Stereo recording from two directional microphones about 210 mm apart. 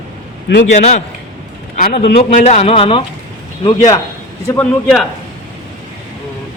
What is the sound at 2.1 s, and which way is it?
Speech, 35° left (ahead or behind).